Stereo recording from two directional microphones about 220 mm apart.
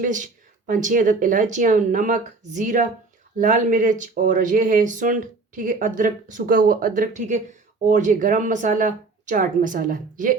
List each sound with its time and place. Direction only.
0.0 s speech: 35° right (ahead or behind)